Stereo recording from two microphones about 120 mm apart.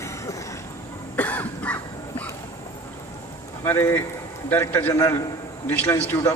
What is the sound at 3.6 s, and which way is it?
A man's voice, 20° left (ahead or behind).